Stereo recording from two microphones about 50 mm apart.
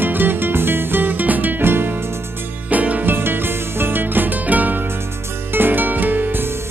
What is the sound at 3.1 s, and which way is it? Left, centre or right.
Music, right.